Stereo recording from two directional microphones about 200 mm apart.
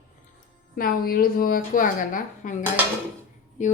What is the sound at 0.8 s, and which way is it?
A woman's voice, 45° left (ahead or behind).